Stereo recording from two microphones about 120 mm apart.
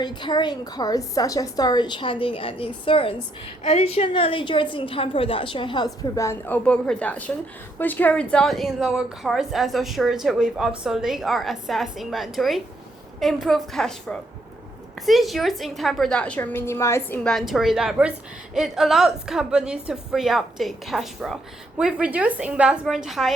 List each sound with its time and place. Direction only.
0.0 s a woman's voice: 40° left (ahead or behind)
3.6 s a woman's voice: 65° left (ahead or behind); by 17.2 s 20° left (ahead or behind)
17.2 s a woman's voice: centre (ahead or behind)